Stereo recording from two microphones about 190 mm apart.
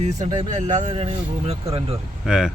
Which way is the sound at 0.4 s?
40° right (ahead or behind).